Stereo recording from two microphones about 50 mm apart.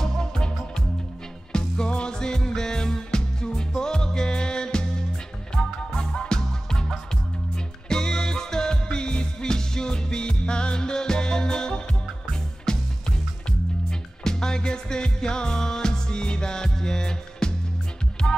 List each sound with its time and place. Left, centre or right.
0.0 s music: centre